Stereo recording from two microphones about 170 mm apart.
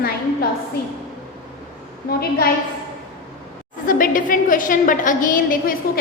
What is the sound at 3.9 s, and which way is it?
A woman's voice, 55° left (ahead or behind).